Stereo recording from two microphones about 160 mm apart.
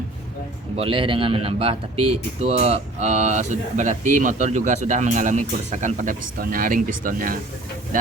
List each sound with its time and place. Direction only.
0.8 s speech: 35° right (ahead or behind); by 7.3 s 60° right (ahead or behind)